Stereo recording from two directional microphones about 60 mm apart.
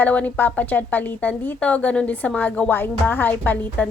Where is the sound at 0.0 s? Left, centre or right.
Left.